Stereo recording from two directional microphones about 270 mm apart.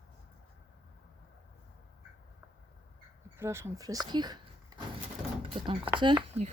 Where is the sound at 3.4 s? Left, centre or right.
Centre.